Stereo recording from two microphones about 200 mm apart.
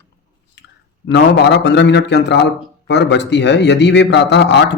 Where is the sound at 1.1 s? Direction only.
60° left (ahead or behind).